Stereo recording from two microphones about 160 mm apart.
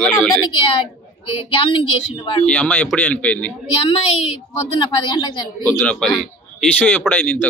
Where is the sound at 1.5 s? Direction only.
35° left (ahead or behind).